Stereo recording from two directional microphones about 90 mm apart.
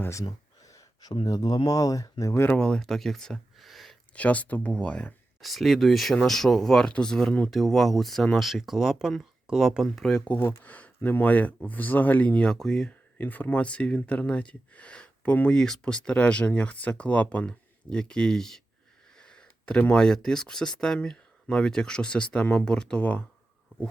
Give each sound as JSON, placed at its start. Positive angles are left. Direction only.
{"t": 0.0, "sound": "a sound", "side_deg": 35}
{"t": 1.2, "sound": "speech", "side_deg": 45}
{"t": 2.6, "sound": "speech", "side_deg": 10}
{"t": 4.1, "sound": "speech", "side_deg": 15}
{"t": 5.4, "sound": "speech", "side_deg": 0}
{"t": 10.0, "sound": "speech", "side_deg": 5}
{"t": 10.6, "sound": "speech", "side_deg": 15}
{"t": 13.1, "sound": "speech", "side_deg": 20}